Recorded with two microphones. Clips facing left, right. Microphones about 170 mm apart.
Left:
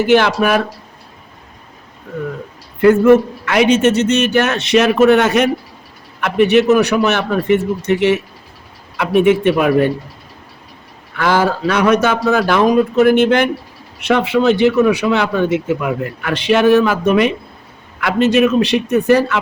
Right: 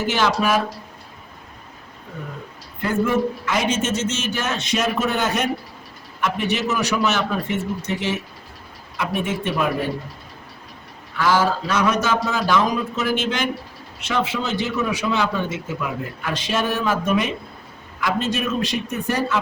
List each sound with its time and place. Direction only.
0.1 s speech: 65° left (ahead or behind)
2.8 s a man's voice: 70° left (ahead or behind)
6.1 s a man's voice: 65° left (ahead or behind)
11.2 s a man's voice: 60° left (ahead or behind)